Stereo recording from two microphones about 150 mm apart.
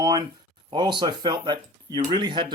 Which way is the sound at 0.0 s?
25° right (ahead or behind).